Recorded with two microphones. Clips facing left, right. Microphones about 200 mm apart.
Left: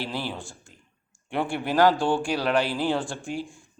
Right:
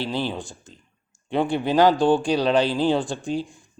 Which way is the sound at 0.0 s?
20° right (ahead or behind).